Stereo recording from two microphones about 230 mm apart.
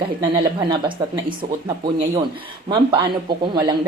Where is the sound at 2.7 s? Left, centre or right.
Right.